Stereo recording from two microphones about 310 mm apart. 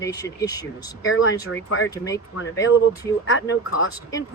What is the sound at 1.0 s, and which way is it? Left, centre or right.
Speech, left.